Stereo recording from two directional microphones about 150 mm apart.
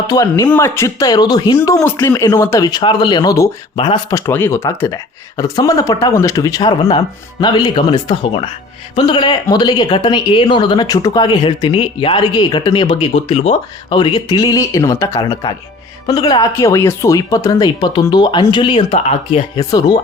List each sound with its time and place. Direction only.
0.1 s speech: 25° left (ahead or behind)
4.1 s speech: 15° left (ahead or behind); by 19.4 s 40° left (ahead or behind)
19.5 s speech: 25° left (ahead or behind)